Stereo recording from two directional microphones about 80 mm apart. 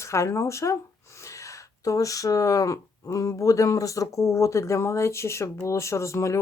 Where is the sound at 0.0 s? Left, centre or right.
Left.